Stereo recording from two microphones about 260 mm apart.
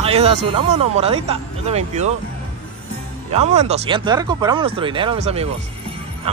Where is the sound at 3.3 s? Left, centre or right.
Right.